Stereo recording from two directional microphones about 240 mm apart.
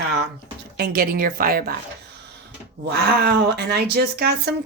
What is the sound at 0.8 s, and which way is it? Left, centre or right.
Speech, right.